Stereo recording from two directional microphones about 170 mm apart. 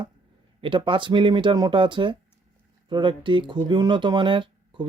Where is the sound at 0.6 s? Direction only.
30° right (ahead or behind).